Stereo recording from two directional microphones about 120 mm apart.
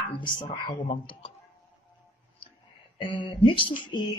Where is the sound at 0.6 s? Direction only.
45° left (ahead or behind).